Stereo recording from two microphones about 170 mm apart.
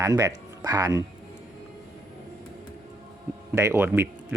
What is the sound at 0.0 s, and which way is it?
Speech, 20° right (ahead or behind).